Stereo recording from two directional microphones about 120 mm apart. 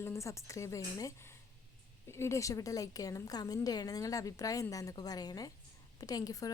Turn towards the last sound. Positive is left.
turn(degrees=30)  # may be behind; listen again after turning